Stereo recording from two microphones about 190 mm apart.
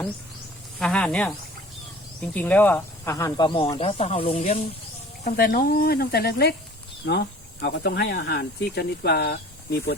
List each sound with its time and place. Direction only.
0.8 s speech: 5° left (ahead or behind); by 4.6 s 35° left (ahead or behind)
5.2 s speech: 50° left (ahead or behind)